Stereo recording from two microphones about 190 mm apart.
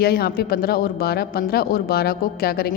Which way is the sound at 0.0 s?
55° left (ahead or behind).